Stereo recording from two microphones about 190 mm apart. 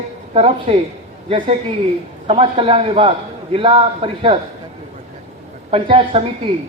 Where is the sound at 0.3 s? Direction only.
30° right (ahead or behind).